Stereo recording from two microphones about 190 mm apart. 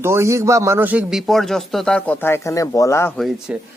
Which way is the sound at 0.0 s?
15° right (ahead or behind).